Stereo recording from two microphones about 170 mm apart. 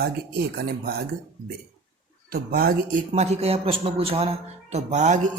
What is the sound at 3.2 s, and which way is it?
A man's voice, 40° right (ahead or behind).